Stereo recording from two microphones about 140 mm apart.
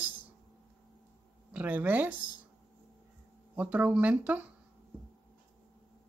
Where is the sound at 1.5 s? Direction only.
10° right (ahead or behind).